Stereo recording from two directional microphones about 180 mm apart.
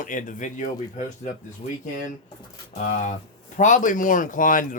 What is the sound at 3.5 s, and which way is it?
Speech, 45° left (ahead or behind).